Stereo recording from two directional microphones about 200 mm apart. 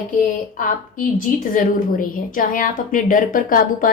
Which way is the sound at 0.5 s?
40° left (ahead or behind).